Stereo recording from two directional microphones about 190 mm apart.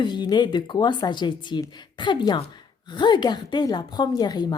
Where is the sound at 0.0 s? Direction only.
25° left (ahead or behind).